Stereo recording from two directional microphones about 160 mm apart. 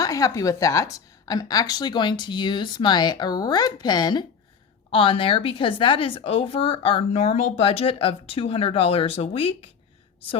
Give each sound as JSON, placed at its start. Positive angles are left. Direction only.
{"t": 0.0, "sound": "a woman's voice", "side_deg": 20}